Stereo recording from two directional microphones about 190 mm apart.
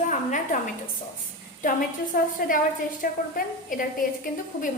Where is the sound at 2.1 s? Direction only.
45° left (ahead or behind).